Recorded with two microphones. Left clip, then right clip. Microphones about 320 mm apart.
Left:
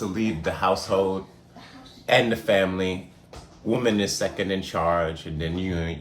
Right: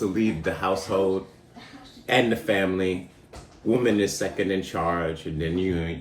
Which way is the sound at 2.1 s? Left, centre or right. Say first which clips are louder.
Left 2 dB; centre.